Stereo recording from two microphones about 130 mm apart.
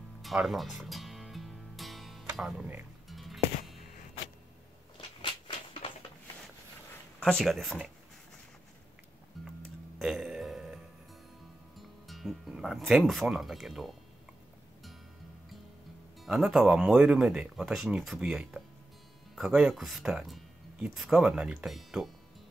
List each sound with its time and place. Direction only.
0.2 s music: centre (ahead or behind)
3.1 s music: centre (ahead or behind)
5.2 s a sound: 40° left (ahead or behind)
7.2 s speech: 5° left (ahead or behind)
9.4 s music: centre (ahead or behind)
12.1 s speech: centre (ahead or behind)
16.2 s speech: centre (ahead or behind)